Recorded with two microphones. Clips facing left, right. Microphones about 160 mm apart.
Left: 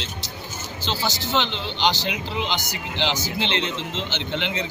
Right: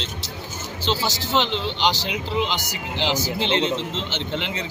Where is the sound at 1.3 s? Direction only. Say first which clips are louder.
Right 5 dB; centre (ahead or behind).